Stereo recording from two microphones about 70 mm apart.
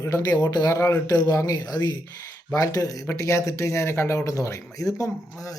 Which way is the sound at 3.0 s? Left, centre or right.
Left.